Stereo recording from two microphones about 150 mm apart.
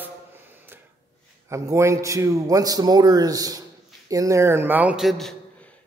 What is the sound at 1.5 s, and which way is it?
A man's voice, 20° right (ahead or behind).